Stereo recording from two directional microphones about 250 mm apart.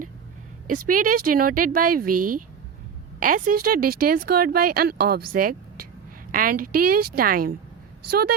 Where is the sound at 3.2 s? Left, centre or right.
Right.